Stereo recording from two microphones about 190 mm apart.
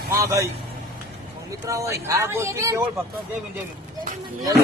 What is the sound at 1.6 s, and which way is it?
Speech, 15° right (ahead or behind).